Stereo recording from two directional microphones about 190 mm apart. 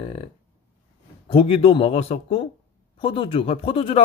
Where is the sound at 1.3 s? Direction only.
30° left (ahead or behind).